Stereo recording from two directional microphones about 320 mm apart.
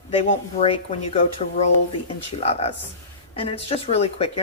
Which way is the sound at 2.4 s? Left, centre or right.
Centre.